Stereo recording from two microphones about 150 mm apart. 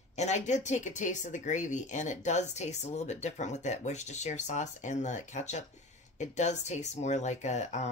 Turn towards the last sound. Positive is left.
turn(degrees=50)  # may be behind; listen again after turning